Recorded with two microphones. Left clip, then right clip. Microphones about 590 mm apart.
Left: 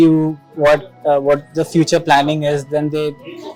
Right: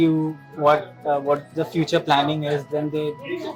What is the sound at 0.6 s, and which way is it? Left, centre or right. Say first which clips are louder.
A man's voice: left 5 dB; left.